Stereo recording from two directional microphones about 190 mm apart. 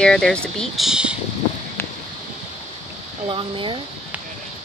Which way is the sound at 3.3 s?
25° right (ahead or behind).